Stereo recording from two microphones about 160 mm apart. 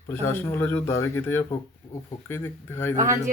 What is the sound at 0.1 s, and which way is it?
Speech, 15° left (ahead or behind).